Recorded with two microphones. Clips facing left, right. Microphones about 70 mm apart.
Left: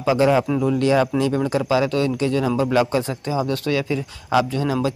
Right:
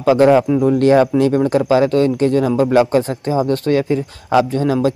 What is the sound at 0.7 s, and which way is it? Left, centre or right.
Speech, right.